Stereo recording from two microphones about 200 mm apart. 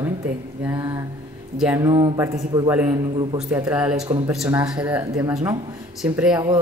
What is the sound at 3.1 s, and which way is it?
Speech, 25° right (ahead or behind).